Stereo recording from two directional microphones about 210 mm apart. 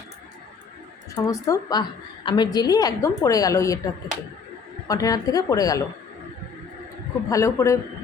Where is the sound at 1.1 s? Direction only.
15° left (ahead or behind).